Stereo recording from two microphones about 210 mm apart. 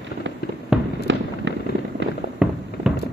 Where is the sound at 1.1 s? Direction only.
60° right (ahead or behind).